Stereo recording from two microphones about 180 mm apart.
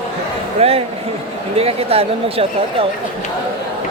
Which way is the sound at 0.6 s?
35° right (ahead or behind).